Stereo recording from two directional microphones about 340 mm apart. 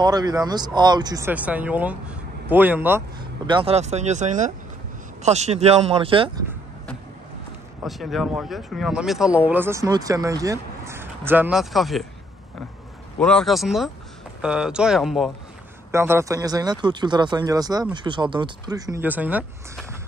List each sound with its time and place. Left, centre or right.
0.0 s speech: centre
7.8 s speech: centre
13.2 s speech: centre